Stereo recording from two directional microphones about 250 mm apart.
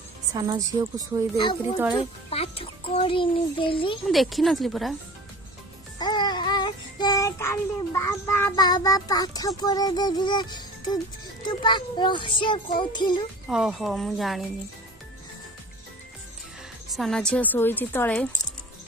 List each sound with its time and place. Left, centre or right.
0.3 s a woman's voice: centre
1.3 s a child's voice: centre
4.1 s a woman's voice: centre
5.9 s child singing: centre
9.6 s a child's voice: centre
13.5 s a woman's voice: centre
16.9 s a woman's voice: centre